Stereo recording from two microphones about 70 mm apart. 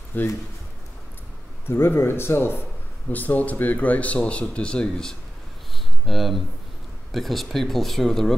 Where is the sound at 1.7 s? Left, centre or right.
Left.